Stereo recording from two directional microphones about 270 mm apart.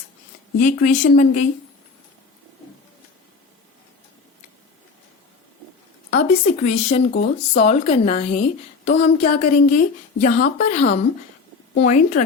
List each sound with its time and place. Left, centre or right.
0.6 s speech: left
6.1 s speech: left
7.1 s speech: left
7.6 s speech: left